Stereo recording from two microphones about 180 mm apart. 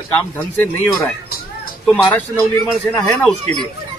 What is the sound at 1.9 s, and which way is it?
A man's voice, 10° left (ahead or behind).